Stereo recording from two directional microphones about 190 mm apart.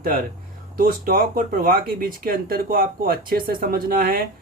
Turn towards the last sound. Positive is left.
turn(degrees=-50)  # may be behind; listen again after turning